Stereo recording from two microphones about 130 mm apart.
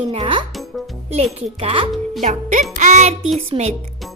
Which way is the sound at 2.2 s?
70° right (ahead or behind).